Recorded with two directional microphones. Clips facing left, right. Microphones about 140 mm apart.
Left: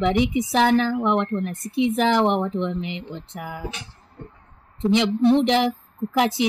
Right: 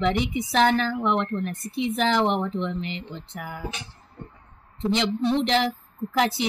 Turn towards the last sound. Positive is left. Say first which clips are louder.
# left 3 dB
turn(degrees=15)  # may be behind; listen again after turning